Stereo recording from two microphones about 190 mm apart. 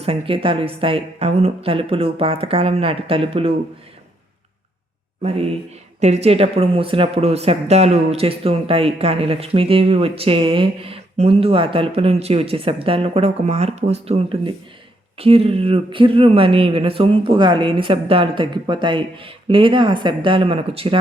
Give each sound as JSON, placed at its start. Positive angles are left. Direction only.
{"t": 0.0, "sound": "speech", "side_deg": -30}
{"t": 5.2, "sound": "speech", "side_deg": -30}